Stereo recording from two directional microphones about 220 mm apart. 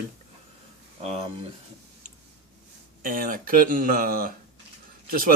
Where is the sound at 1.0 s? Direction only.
30° right (ahead or behind).